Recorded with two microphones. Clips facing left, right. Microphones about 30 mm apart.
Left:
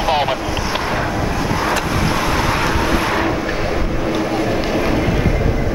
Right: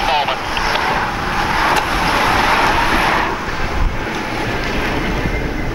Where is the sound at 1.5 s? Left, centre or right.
Right.